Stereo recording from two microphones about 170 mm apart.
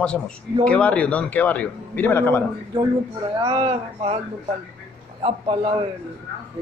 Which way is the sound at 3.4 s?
30° right (ahead or behind).